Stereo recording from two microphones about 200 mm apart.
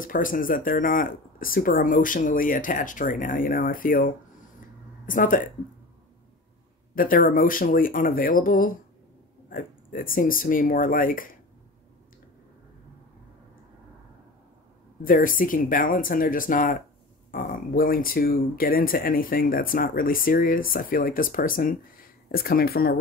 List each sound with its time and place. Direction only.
0.0 s speech: 45° left (ahead or behind)
7.0 s speech: 45° left (ahead or behind)
15.0 s speech: 45° left (ahead or behind)